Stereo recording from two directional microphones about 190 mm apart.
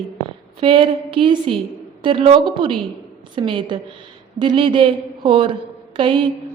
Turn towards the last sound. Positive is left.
turn(degrees=-25)  # may be behind; listen again after turning